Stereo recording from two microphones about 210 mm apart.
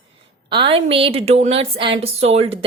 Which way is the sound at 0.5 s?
25° right (ahead or behind).